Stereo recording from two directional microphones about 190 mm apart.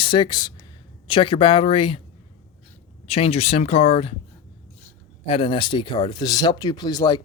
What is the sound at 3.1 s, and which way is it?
Speech, 30° left (ahead or behind).